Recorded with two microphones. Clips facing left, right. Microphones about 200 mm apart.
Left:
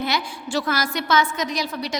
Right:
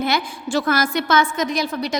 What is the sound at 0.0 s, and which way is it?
A woman's voice, 50° right (ahead or behind).